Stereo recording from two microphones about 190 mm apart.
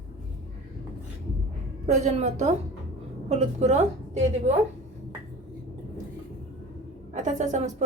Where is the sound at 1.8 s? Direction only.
35° right (ahead or behind).